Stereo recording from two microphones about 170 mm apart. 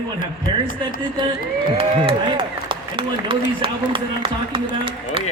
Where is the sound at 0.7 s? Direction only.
50° left (ahead or behind).